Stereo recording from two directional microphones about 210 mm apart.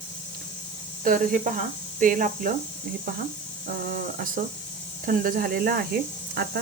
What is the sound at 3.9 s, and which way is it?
Speech, 40° right (ahead or behind).